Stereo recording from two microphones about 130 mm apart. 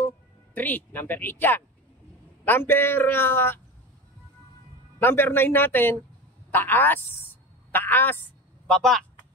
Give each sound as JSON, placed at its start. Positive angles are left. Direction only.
{"t": 0.6, "sound": "a man's voice", "side_deg": 15}
{"t": 4.9, "sound": "a man's voice", "side_deg": 15}
{"t": 8.6, "sound": "speech", "side_deg": 5}